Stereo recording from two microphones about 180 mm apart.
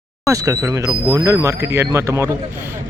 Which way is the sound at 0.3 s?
20° right (ahead or behind).